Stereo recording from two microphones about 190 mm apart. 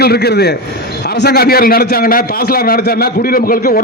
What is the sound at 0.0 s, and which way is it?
A man's voice, 55° left (ahead or behind).